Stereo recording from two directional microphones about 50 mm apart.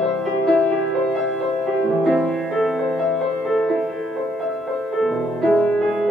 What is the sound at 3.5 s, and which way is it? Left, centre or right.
Music, centre.